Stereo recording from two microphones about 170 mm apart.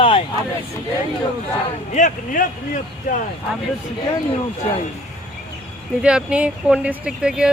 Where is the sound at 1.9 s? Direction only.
50° left (ahead or behind).